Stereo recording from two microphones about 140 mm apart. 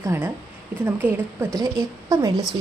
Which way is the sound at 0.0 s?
20° right (ahead or behind).